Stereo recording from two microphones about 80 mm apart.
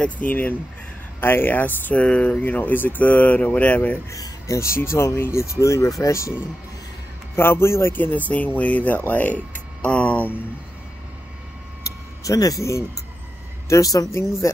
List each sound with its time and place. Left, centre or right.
0.0 s speech: left
4.1 s speech: left
7.3 s speech: left
11.8 s vehicle: left
13.7 s speech: left